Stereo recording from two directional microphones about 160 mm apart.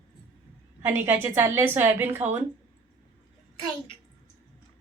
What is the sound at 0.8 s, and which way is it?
A woman's voice, 15° right (ahead or behind).